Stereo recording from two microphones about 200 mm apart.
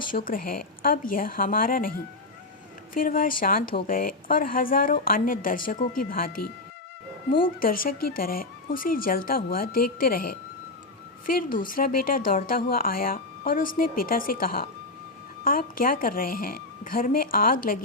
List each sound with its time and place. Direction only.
0.3 s speech: 45° left (ahead or behind)
2.9 s speech: 45° left (ahead or behind)
7.6 s speech: 45° left (ahead or behind)